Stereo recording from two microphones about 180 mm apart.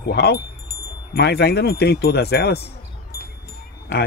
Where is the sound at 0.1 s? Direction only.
65° left (ahead or behind).